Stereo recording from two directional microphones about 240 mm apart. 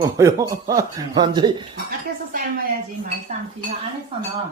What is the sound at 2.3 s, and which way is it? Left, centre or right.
Speech, right.